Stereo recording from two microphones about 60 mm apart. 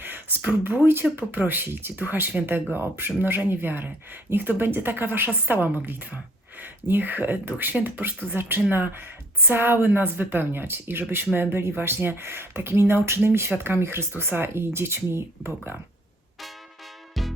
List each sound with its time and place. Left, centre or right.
0.0 s a sound: right
1.1 s speech: right
17.2 s music: centre